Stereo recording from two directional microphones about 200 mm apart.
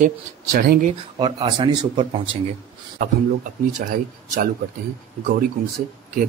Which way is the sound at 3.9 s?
40° right (ahead or behind).